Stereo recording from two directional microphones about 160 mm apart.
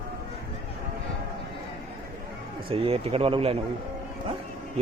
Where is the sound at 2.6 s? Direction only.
35° right (ahead or behind).